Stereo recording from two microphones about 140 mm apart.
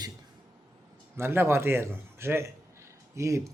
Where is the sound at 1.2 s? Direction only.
15° right (ahead or behind).